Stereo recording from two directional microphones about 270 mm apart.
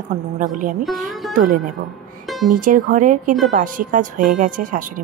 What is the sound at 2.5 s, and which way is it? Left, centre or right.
Speech, right.